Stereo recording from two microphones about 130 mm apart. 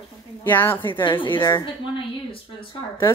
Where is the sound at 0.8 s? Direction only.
40° left (ahead or behind).